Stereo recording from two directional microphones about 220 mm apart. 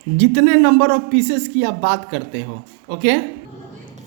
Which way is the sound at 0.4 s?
50° right (ahead or behind).